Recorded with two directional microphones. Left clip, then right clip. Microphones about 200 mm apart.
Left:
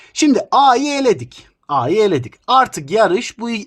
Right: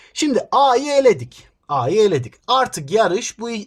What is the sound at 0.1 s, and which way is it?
Speech, 30° left (ahead or behind).